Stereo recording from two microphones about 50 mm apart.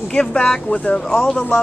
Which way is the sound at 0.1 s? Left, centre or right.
Centre.